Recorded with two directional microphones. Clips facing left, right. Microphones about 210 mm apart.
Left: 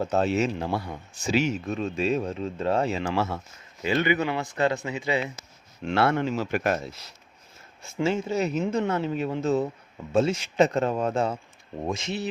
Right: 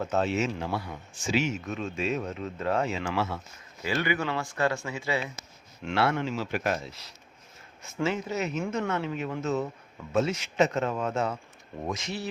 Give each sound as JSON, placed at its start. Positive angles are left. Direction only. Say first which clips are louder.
{"t": 0.0, "sound": "a man's voice", "louder": "left 3 dB", "side_deg": 35}
{"t": 3.8, "sound": "speech", "louder": "left 4 dB", "side_deg": 20}
{"t": 5.8, "sound": "speech", "louder": "left 3 dB", "side_deg": 50}
{"t": 8.0, "sound": "a man's voice", "louder": "left 4 dB", "side_deg": 30}